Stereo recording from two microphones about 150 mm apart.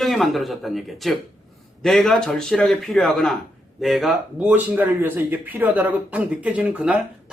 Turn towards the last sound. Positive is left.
turn(degrees=-5)  # may be behind; listen again after turning